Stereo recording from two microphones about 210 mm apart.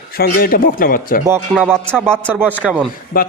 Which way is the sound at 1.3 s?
10° right (ahead or behind).